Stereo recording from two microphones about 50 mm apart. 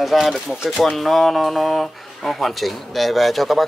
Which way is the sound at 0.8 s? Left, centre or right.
Centre.